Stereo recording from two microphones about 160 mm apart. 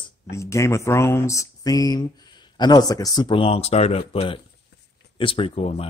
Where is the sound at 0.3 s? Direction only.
20° left (ahead or behind).